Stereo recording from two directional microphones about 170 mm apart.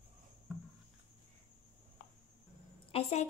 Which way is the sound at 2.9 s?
40° left (ahead or behind).